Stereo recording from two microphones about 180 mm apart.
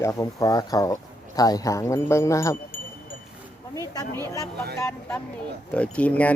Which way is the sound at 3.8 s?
15° left (ahead or behind).